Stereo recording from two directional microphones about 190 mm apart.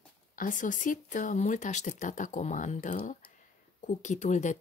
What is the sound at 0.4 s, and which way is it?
Speech, 45° left (ahead or behind).